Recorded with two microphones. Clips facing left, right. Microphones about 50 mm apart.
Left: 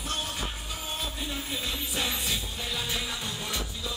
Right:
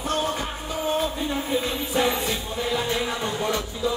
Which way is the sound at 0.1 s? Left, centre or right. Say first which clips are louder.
Right 8 dB; centre.